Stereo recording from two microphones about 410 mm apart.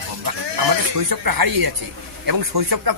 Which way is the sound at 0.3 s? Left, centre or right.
Right.